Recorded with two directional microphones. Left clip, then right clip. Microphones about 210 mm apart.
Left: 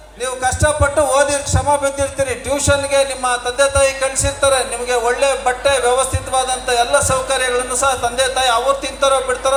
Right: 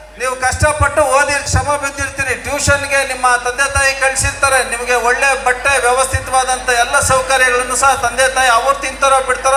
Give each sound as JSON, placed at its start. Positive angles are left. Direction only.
{"t": 0.3, "sound": "speech", "side_deg": 50}